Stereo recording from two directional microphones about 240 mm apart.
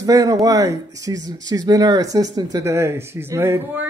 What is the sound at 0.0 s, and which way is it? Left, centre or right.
Speech, centre.